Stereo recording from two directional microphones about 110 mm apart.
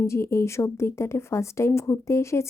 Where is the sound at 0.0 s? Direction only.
25° left (ahead or behind).